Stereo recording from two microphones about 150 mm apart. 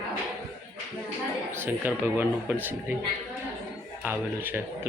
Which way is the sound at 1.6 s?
15° right (ahead or behind).